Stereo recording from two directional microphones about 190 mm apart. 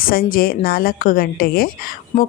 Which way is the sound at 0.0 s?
50° left (ahead or behind).